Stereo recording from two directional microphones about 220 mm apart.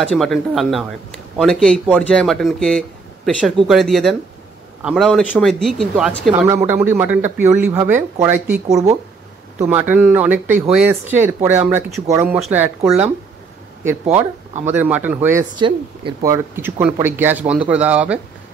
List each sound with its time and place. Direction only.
0.0 s speech: centre (ahead or behind)
9.7 s speech: 10° right (ahead or behind)
14.7 s speech: 10° right (ahead or behind)
15.6 s speech: 20° right (ahead or behind)
16.3 s speech: 10° right (ahead or behind)